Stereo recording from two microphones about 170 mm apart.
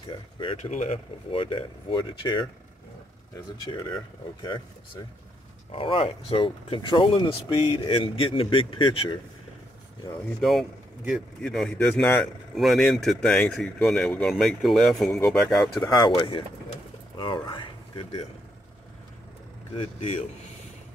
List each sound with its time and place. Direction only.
0.1 s speech: 30° left (ahead or behind)
3.6 s speech: 30° left (ahead or behind)
5.7 s speech: 30° left (ahead or behind)
10.4 s a man's voice: centre (ahead or behind)
12.2 s speech: centre (ahead or behind)
15.8 s speech: 25° left (ahead or behind)
19.7 s speech: 40° left (ahead or behind)